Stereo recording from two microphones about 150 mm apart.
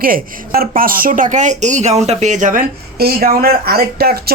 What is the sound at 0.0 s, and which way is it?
Speech, 75° right (ahead or behind).